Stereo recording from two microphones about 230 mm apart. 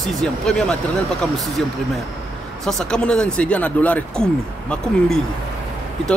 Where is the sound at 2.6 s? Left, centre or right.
Centre.